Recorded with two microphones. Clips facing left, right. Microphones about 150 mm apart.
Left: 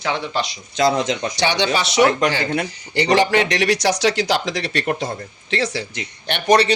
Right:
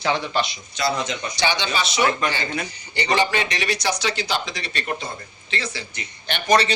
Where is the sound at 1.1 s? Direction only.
85° left.